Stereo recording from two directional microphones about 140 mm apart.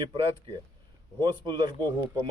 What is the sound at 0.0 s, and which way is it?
A man's voice, 35° right (ahead or behind).